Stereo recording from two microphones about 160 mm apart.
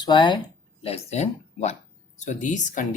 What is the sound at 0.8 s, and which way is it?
Speech, 40° left (ahead or behind).